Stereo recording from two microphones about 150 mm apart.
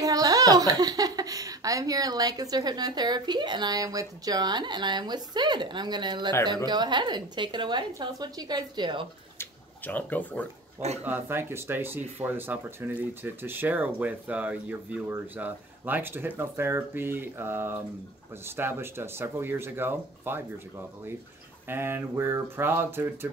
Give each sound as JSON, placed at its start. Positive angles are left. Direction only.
{"t": 0.0, "sound": "speech", "side_deg": -25}
{"t": 9.4, "sound": "a sound", "side_deg": 10}
{"t": 11.1, "sound": "speech", "side_deg": -15}
{"t": 21.6, "sound": "speech", "side_deg": -15}